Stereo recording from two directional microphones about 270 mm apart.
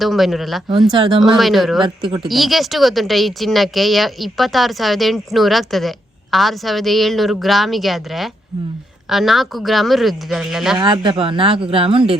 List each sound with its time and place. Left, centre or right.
0.0 s speech: centre
0.9 s speech: centre
1.2 s speech: centre
1.8 s speech: centre
2.2 s speech: centre
10.8 s speech: centre